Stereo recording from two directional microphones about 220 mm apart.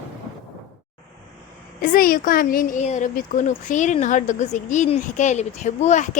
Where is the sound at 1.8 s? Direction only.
40° left (ahead or behind).